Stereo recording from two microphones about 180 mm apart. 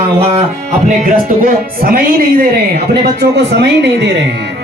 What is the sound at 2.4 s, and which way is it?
Speech, 65° right (ahead or behind).